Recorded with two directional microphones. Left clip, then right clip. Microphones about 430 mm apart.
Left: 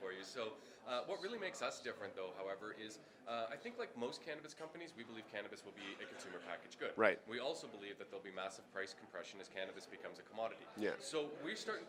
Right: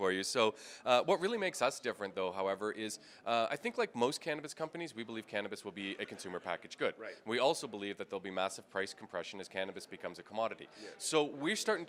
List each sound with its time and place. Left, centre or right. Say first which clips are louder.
0.0 s speech: right 14 dB; right